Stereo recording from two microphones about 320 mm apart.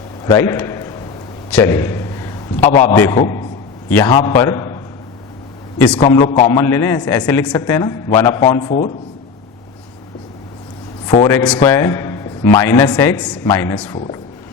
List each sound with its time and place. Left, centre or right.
0.3 s a man's voice: centre
1.5 s a sound: centre
2.8 s a man's voice: centre
6.0 s a man's voice: centre
11.0 s a man's voice: centre